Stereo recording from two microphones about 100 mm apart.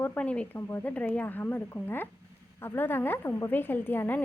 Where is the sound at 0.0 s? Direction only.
15° left (ahead or behind).